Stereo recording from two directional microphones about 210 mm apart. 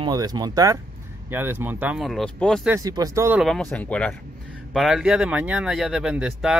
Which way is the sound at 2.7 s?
15° right (ahead or behind).